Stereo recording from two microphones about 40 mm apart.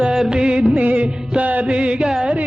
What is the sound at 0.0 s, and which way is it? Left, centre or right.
Music of bollywood, centre.